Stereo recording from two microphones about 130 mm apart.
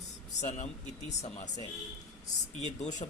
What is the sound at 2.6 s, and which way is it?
Speech, 65° left (ahead or behind).